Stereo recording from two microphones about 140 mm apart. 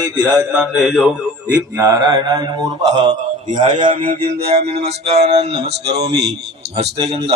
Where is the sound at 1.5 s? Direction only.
15° right (ahead or behind).